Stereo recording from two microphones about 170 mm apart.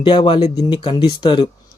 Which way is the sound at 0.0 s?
30° left (ahead or behind).